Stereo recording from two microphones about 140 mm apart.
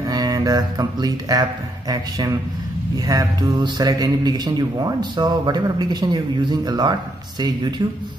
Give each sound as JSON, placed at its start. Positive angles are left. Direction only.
{"t": 0.0, "sound": "mantra", "side_deg": -25}
{"t": 1.9, "sound": "speech", "side_deg": -25}